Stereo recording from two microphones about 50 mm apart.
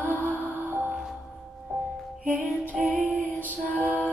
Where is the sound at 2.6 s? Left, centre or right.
Right.